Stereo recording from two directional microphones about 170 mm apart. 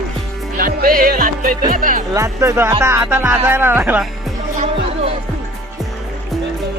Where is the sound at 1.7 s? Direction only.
55° right (ahead or behind).